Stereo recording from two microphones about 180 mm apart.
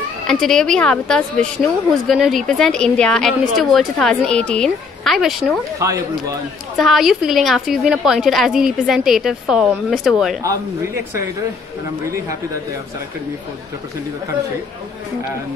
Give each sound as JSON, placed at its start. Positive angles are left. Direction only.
{"t": 0.3, "sound": "a woman's voice", "side_deg": 5}
{"t": 5.8, "sound": "speech", "side_deg": -15}
{"t": 6.8, "sound": "a woman's voice", "side_deg": 0}